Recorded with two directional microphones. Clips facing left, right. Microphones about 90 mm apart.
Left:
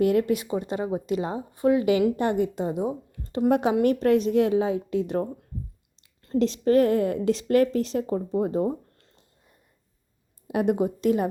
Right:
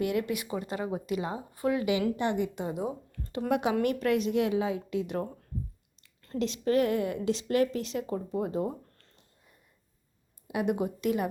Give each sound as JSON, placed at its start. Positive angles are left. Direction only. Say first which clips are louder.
{"t": 0.0, "sound": "a woman's voice", "louder": "left 8 dB", "side_deg": 40}
{"t": 0.4, "sound": "speech", "louder": "left 5 dB", "side_deg": 25}
{"t": 2.1, "sound": "a woman's voice", "louder": "left 5 dB", "side_deg": 40}
{"t": 2.7, "sound": "speech", "louder": "left 5 dB", "side_deg": 25}
{"t": 3.5, "sound": "a woman's voice", "louder": "left 5 dB", "side_deg": 35}
{"t": 6.0, "sound": "a sound", "louder": "left 10 dB", "side_deg": 25}
{"t": 6.4, "sound": "a woman's voice", "louder": "left 6 dB", "side_deg": 35}
{"t": 10.5, "sound": "a woman's voice", "louder": "left 6 dB", "side_deg": 40}